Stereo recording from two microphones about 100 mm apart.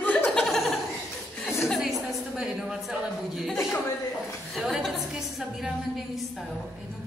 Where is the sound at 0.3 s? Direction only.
5° left (ahead or behind).